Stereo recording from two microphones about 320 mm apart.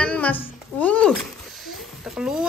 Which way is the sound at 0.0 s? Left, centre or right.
Centre.